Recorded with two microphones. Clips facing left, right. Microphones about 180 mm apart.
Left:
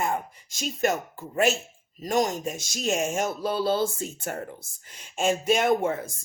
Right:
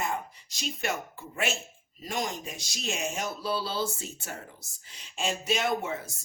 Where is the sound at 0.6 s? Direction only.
45° left (ahead or behind).